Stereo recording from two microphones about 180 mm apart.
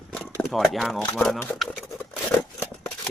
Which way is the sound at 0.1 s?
5° left (ahead or behind).